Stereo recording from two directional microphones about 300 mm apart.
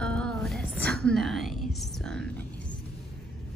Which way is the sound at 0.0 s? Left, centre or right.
Centre.